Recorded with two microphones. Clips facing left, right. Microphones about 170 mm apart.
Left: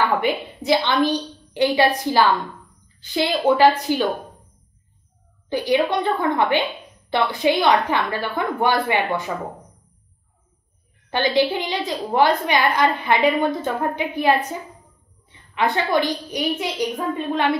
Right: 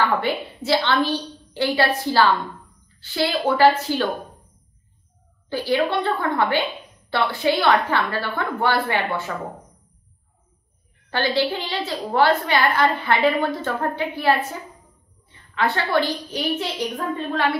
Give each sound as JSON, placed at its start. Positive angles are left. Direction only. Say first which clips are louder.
{"t": 0.2, "sound": "a woman's voice", "louder": "left 2 dB", "side_deg": 15}
{"t": 5.5, "sound": "a woman's voice", "louder": "left 2 dB", "side_deg": 15}
{"t": 11.1, "sound": "a woman's voice", "louder": "left 3 dB", "side_deg": 20}